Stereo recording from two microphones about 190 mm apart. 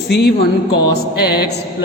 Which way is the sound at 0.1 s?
60° left (ahead or behind).